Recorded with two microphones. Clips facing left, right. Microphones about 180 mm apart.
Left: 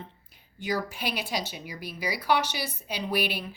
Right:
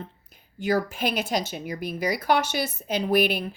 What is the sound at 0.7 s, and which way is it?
A woman's voice, 50° right (ahead or behind).